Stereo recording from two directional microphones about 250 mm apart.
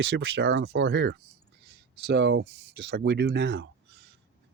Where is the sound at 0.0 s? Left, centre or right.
Right.